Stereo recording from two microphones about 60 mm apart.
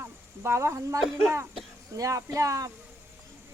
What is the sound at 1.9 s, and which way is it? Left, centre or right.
Speech, right.